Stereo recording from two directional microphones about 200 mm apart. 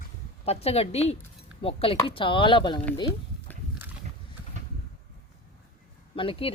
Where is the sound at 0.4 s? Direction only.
30° left (ahead or behind).